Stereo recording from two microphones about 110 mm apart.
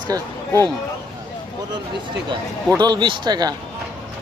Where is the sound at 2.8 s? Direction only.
45° right (ahead or behind).